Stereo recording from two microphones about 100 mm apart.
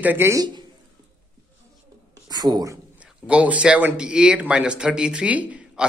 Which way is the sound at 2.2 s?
40° right (ahead or behind).